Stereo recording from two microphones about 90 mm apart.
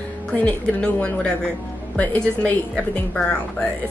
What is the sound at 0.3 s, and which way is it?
A woman's voice, 15° left (ahead or behind).